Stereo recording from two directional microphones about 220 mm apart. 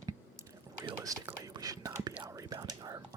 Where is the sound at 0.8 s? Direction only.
15° right (ahead or behind).